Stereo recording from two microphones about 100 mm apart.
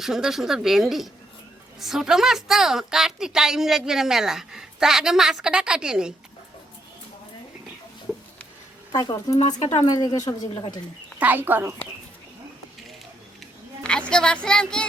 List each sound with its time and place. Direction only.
0.0 s a woman's voice: 5° right (ahead or behind)
8.9 s speech: 40° left (ahead or behind)
10.5 s speech: 55° left (ahead or behind)
11.2 s speech: 20° right (ahead or behind)
14.1 s speech: 10° left (ahead or behind)